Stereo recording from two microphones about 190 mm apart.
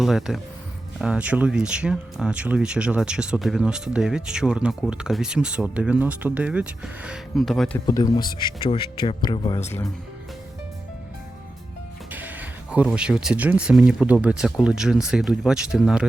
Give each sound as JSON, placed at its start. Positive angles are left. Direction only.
{"t": 0.0, "sound": "speech", "side_deg": 0}
{"t": 7.9, "sound": "speech", "side_deg": 20}
{"t": 12.1, "sound": "speech", "side_deg": -10}